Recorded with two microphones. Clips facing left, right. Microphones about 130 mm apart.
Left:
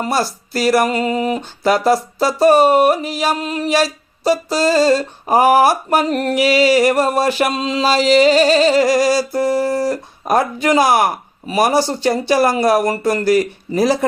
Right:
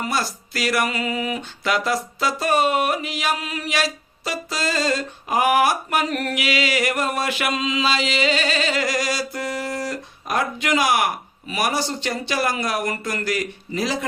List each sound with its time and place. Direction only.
0.0 s speech: 35° left (ahead or behind)